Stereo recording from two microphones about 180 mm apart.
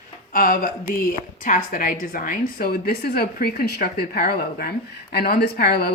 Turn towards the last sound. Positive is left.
turn(degrees=65)  # may be behind; listen again after turning